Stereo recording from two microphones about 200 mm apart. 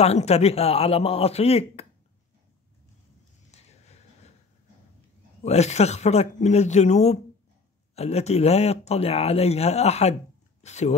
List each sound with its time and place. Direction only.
0.0 s a man's voice: 30° left (ahead or behind)
3.5 s a sound: 30° left (ahead or behind)
5.4 s speech: 35° left (ahead or behind)